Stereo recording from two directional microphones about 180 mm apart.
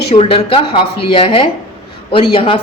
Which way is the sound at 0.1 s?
35° left (ahead or behind).